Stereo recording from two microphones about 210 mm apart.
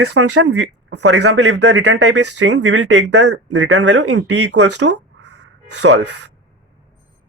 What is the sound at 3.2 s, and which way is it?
Speech, 75° right (ahead or behind).